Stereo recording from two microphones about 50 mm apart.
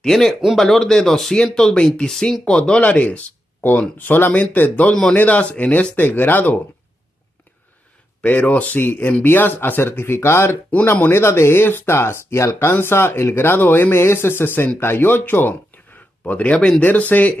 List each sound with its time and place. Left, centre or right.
0.0 s speech: centre
2.8 s speech: left
5.9 s speech: left
8.2 s speech: left
12.5 s speech: left
16.3 s speech: left
16.5 s speech: centre
16.8 s speech: left